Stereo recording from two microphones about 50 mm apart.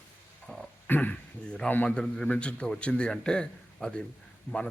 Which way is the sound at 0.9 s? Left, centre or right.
Left.